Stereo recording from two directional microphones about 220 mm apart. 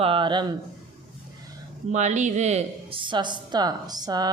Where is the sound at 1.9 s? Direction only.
30° right (ahead or behind).